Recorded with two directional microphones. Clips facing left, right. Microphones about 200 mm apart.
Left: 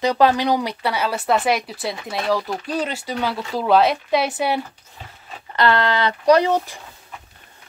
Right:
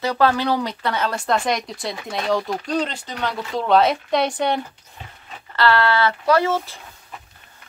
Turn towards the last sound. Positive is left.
turn(degrees=15)  # may be behind; listen again after turning